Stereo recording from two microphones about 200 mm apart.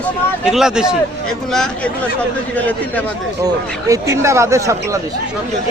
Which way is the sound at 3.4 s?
15° right (ahead or behind).